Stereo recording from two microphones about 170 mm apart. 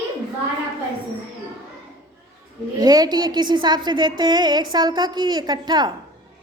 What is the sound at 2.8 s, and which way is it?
A woman's voice, 25° right (ahead or behind).